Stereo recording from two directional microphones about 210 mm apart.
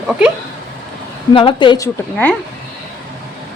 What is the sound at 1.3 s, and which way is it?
Speech, 25° left (ahead or behind).